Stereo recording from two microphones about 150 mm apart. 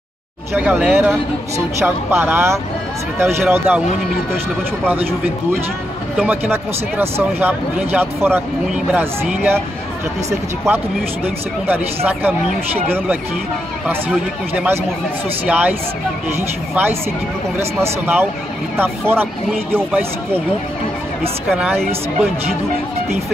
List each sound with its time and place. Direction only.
0.5 s speech: 10° right (ahead or behind)
4.8 s speech: 10° right (ahead or behind)
21.5 s speech: 5° right (ahead or behind)